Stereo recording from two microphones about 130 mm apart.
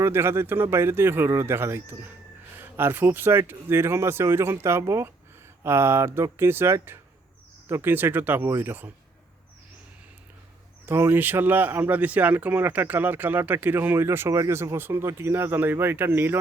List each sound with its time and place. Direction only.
0.0 s speech: 20° right (ahead or behind)
10.8 s speech: 20° right (ahead or behind)